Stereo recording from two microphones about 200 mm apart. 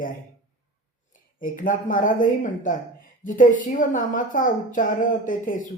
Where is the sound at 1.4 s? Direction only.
40° left (ahead or behind).